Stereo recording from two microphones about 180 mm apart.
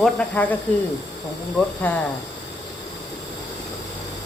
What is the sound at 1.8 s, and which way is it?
Speech, 10° left (ahead or behind).